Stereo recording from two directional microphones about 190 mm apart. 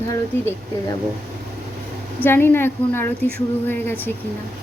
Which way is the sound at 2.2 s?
10° left (ahead or behind).